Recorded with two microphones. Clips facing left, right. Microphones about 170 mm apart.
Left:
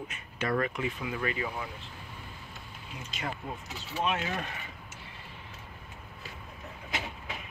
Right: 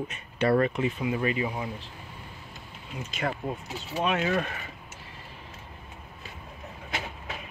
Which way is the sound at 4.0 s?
75° right (ahead or behind).